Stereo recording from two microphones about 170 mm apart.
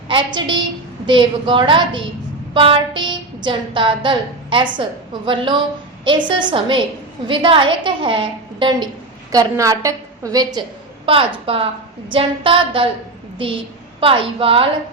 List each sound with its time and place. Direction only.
0.1 s a woman's voice: 25° right (ahead or behind)
14.0 s a woman's voice: 30° right (ahead or behind)